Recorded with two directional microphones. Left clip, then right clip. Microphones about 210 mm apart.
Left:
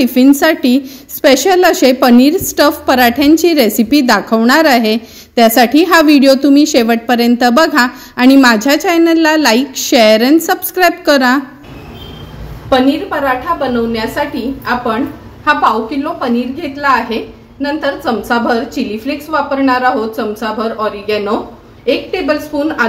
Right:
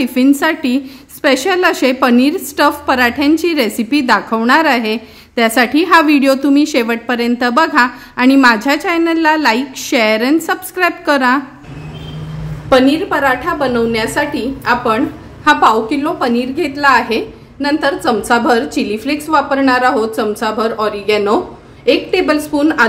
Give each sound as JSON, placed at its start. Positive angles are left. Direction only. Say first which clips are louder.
{"t": 0.0, "sound": "a woman's voice", "louder": "left 4 dB", "side_deg": 5}
{"t": 12.6, "sound": "a woman's voice", "louder": "right 1 dB", "side_deg": -25}